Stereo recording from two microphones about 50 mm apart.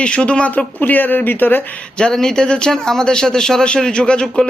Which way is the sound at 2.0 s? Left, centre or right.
Centre.